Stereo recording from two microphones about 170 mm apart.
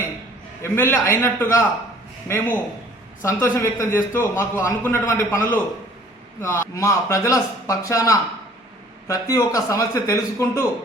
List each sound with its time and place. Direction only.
0.6 s a man's voice: 15° left (ahead or behind)